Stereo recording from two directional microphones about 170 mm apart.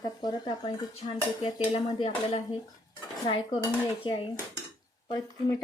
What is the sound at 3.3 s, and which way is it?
Speech, 30° left (ahead or behind).